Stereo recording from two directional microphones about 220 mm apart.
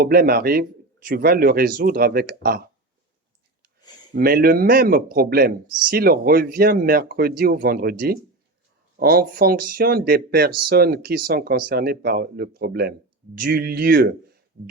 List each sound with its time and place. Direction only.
0.0 s speech: 40° right (ahead or behind)
4.1 s speech: 40° right (ahead or behind)